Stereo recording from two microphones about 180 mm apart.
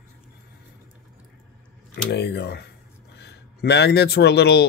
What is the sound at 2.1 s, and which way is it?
Speech, 70° left (ahead or behind).